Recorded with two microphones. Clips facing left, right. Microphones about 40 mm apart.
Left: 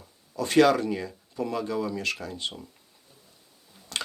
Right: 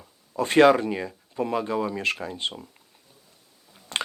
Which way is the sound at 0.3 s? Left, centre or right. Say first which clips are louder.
Right 3 dB; right.